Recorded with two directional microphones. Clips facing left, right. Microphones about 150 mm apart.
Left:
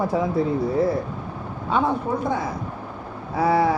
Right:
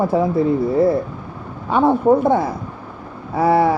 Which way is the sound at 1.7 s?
60° right (ahead or behind).